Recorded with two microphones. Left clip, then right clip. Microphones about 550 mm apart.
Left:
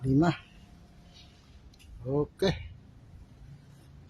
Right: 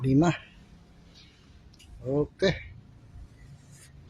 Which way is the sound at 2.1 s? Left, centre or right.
Left.